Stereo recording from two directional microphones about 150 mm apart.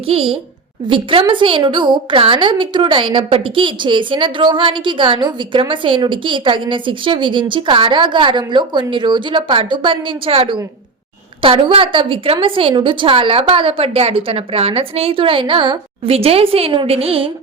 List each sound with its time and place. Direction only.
0.1 s a woman's voice: 40° right (ahead or behind)